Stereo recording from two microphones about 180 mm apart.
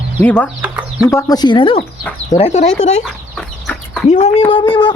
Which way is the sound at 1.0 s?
20° left (ahead or behind).